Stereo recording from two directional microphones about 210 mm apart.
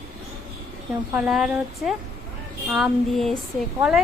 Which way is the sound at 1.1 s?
5° right (ahead or behind).